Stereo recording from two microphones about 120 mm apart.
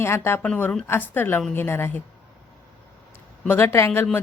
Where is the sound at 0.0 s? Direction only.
20° left (ahead or behind).